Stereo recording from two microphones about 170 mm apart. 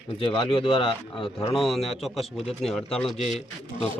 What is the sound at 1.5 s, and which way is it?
A man's voice, centre (ahead or behind).